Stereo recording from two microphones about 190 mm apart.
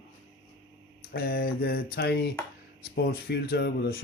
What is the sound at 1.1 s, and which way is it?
Speech, 50° left (ahead or behind).